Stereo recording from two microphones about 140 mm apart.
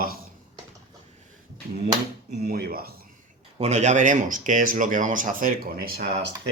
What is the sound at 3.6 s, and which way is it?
Speech, 55° right (ahead or behind).